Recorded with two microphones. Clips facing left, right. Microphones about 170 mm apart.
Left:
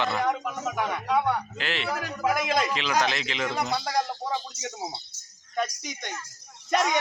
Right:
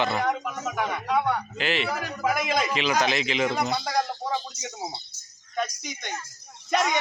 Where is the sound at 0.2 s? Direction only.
5° right (ahead or behind).